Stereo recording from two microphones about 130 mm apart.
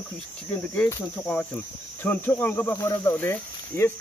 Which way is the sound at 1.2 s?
10° left (ahead or behind).